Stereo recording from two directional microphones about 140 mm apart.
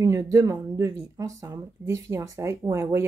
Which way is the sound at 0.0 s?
20° right (ahead or behind).